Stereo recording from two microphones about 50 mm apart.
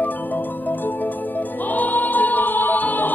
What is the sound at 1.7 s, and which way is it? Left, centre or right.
Music, left.